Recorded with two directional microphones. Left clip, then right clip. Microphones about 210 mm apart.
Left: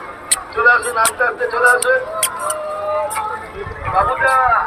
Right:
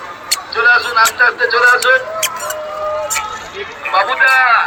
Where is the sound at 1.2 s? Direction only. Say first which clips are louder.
Right 6 dB; 40° left (ahead or behind).